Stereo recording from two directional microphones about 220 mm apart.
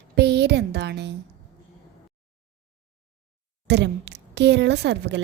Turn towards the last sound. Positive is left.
turn(degrees=-50)  # may be behind; listen again after turning